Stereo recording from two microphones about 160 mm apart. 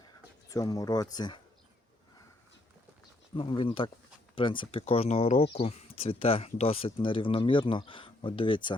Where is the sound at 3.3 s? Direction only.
35° left (ahead or behind).